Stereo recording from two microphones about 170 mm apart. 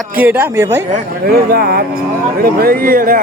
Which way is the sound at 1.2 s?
65° right (ahead or behind).